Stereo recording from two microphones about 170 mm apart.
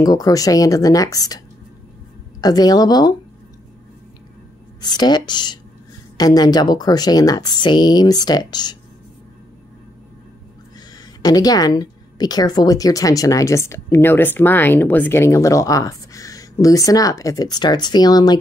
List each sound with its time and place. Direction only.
0.0 s a woman's voice: 20° left (ahead or behind)
2.4 s a woman's voice: 20° left (ahead or behind)
4.8 s a woman's voice: 25° left (ahead or behind)
11.2 s a woman's voice: 20° left (ahead or behind)